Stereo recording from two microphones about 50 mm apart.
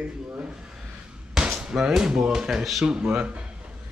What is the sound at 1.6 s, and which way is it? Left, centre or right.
Speech, centre.